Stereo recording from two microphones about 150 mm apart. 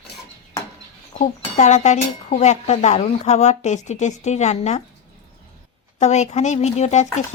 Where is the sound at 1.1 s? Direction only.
55° left (ahead or behind).